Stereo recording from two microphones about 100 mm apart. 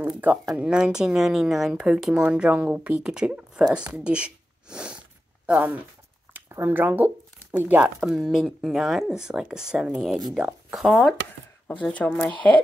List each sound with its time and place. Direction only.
0.1 s speech: 15° right (ahead or behind)
8.0 s speech: 5° right (ahead or behind)
11.6 s speech: 15° left (ahead or behind)